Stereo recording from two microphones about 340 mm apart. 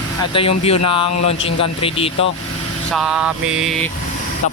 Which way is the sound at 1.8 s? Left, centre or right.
Centre.